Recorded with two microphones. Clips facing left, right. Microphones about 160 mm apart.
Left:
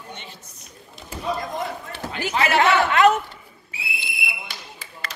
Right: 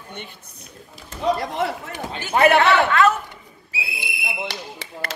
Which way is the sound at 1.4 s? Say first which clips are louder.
Right 4 dB; 75° right (ahead or behind).